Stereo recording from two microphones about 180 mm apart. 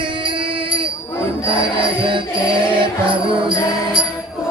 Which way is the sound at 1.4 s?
30° right (ahead or behind).